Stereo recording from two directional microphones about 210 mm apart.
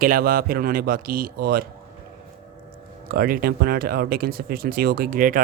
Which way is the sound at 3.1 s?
45° right (ahead or behind).